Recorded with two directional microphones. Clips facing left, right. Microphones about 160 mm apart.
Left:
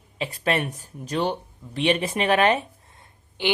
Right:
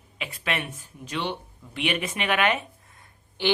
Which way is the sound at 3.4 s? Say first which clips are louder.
Even; 15° left (ahead or behind).